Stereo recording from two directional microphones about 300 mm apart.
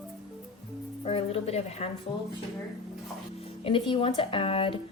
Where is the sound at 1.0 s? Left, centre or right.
Centre.